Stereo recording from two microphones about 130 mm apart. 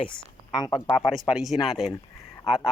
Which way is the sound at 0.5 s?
30° left (ahead or behind).